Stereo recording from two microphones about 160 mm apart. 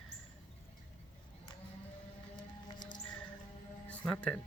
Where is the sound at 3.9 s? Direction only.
5° left (ahead or behind).